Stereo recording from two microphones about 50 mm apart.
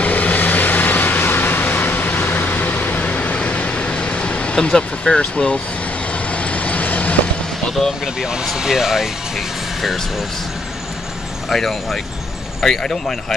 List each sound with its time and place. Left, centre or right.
0.0 s vehicle: left
8.5 s speech: centre
11.4 s speech: centre